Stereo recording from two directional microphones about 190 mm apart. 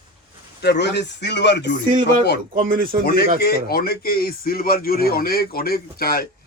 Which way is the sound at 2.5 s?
50° right (ahead or behind).